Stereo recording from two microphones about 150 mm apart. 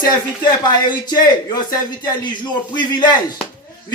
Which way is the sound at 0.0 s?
25° left (ahead or behind).